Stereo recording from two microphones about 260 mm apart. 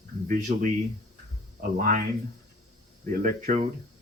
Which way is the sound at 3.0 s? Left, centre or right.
Right.